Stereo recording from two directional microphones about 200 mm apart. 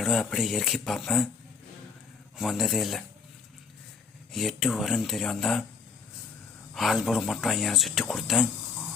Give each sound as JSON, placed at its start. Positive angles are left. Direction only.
{"t": 0.0, "sound": "speech", "side_deg": 0}
{"t": 2.4, "sound": "speech", "side_deg": 0}
{"t": 4.3, "sound": "speech", "side_deg": 0}
{"t": 6.7, "sound": "speech", "side_deg": 0}